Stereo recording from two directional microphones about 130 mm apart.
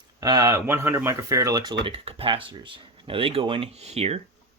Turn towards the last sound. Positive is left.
turn(degrees=-55)  # may be behind; listen again after turning